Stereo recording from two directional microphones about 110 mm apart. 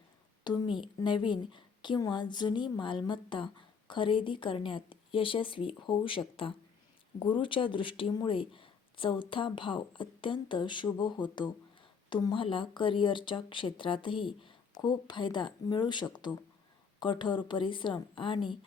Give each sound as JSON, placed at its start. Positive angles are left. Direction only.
{"t": 0.4, "sound": "a woman's voice", "side_deg": 40}